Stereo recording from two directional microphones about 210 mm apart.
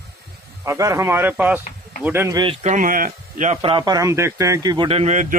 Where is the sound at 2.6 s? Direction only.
40° right (ahead or behind).